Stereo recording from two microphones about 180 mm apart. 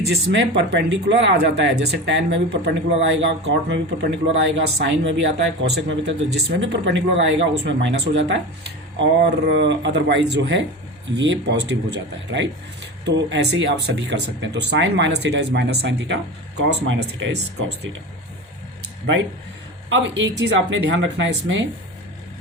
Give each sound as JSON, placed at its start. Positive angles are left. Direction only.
{"t": 0.0, "sound": "speech", "side_deg": -70}
{"t": 19.9, "sound": "speech", "side_deg": -90}